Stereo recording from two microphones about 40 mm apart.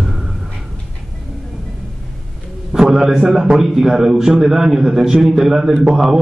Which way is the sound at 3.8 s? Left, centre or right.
Centre.